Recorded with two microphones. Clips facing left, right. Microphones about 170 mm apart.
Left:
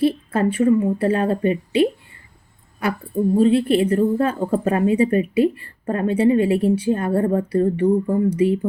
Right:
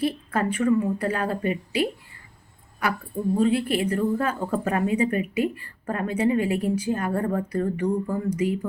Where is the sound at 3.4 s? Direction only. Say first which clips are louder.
Left 6 dB; 30° left (ahead or behind).